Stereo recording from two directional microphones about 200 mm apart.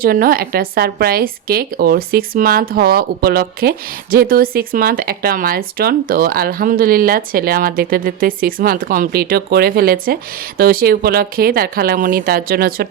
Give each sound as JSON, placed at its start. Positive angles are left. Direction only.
{"t": 0.0, "sound": "a woman's voice", "side_deg": -45}